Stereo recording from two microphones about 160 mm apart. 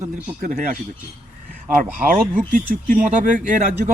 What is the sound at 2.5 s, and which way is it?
A man's voice, 60° right (ahead or behind).